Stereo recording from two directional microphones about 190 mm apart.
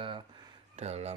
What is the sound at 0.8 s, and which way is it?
Speech, 35° right (ahead or behind).